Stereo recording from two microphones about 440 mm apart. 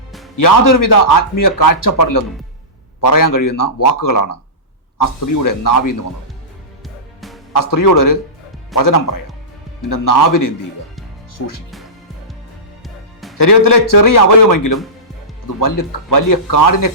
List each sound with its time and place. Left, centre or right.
0.3 s speech: left
6.8 s music: centre
7.5 s speech: left
13.3 s speech: left